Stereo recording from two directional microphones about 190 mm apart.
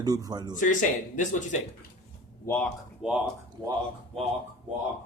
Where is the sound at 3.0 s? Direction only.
5° right (ahead or behind).